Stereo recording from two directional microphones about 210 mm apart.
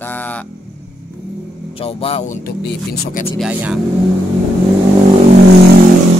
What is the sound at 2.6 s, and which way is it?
Speech, 50° left (ahead or behind).